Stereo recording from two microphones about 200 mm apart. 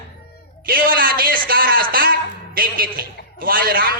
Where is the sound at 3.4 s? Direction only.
45° right (ahead or behind).